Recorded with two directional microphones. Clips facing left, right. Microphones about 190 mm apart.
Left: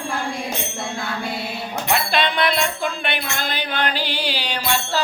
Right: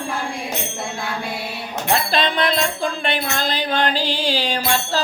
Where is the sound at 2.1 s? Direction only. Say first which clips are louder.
Right 1 dB; 40° right (ahead or behind).